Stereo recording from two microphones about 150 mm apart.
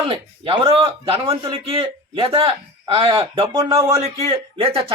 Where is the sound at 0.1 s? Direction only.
35° right (ahead or behind).